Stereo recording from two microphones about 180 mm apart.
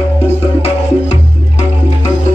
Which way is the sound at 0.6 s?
35° left (ahead or behind).